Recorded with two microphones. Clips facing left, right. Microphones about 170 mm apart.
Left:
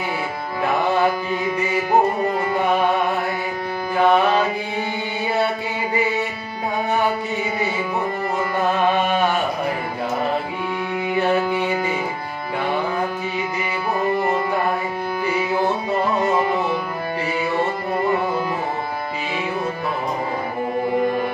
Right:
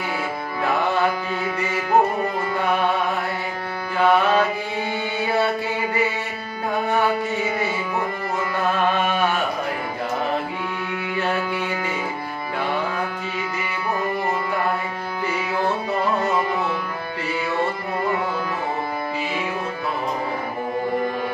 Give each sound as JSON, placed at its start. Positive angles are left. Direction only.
{"t": 3.9, "sound": "music", "side_deg": 15}
{"t": 11.1, "sound": "music", "side_deg": 15}